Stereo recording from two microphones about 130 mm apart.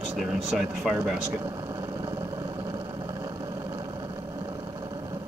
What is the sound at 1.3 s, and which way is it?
Vehicle, 25° right (ahead or behind).